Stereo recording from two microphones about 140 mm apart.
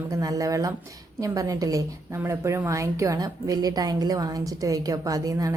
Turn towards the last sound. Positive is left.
turn(degrees=-25)  # may be behind; listen again after turning